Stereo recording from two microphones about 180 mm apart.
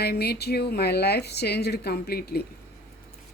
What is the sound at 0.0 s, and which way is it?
Speech, 60° left (ahead or behind).